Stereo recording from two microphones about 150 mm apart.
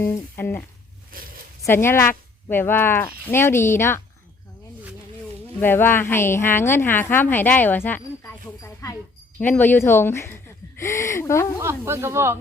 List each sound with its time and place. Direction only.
0.0 s a woman's voice: 15° left (ahead or behind)
1.1 s zipper: 75° right (ahead or behind)
1.6 s a woman's voice: 15° left (ahead or behind)
5.5 s a woman's voice: 15° left (ahead or behind)
11.6 s speech: 20° right (ahead or behind)